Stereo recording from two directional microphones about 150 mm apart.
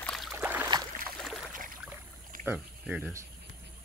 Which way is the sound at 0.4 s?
10° right (ahead or behind).